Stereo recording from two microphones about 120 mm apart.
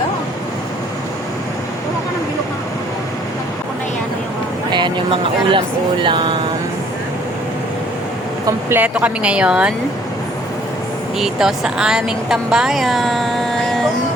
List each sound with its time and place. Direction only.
4.7 s a sound: 40° right (ahead or behind)
5.5 s speech: 45° right (ahead or behind)
8.4 s speech: 20° right (ahead or behind)
9.0 s speech: 10° right (ahead or behind)
11.2 s a woman's voice: 5° right (ahead or behind)